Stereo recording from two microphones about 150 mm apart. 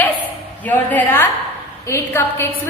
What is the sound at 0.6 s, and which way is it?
A woman's voice, 10° left (ahead or behind).